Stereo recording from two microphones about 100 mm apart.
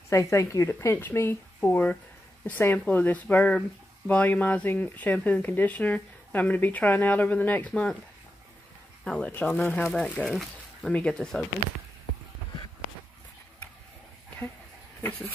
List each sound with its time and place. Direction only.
0.1 s speech: 30° left (ahead or behind); by 7.9 s 15° left (ahead or behind)
9.0 s speech: 10° left (ahead or behind)
10.9 s speech: 10° left (ahead or behind)
15.0 s a sound: 15° left (ahead or behind)